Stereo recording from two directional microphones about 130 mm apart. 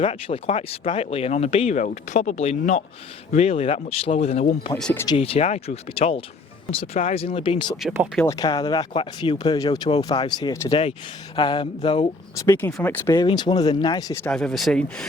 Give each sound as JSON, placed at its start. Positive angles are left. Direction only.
{"t": 0.0, "sound": "speech", "side_deg": 55}
{"t": 7.8, "sound": "speech", "side_deg": -5}
{"t": 8.3, "sound": "speech", "side_deg": 35}
{"t": 10.7, "sound": "speech", "side_deg": 50}
{"t": 12.8, "sound": "speech", "side_deg": 15}
{"t": 13.1, "sound": "speech", "side_deg": 35}
{"t": 14.3, "sound": "speech", "side_deg": 5}